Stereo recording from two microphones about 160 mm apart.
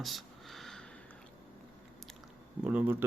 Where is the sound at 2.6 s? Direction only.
10° right (ahead or behind).